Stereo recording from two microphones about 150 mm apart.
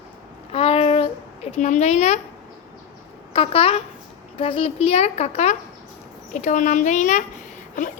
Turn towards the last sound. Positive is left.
turn(degrees=55)  # may be behind; listen again after turning